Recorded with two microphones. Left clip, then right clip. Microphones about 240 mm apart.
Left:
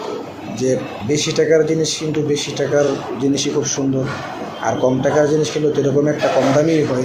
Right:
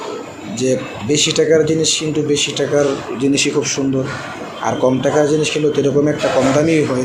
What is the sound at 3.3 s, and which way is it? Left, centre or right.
Speech, right.